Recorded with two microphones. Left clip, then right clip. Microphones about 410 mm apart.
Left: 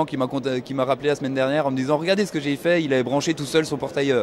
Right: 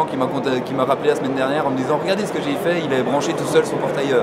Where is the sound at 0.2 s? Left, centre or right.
Left.